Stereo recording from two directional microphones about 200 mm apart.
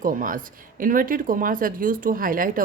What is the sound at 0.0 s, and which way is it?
Speech, 45° right (ahead or behind).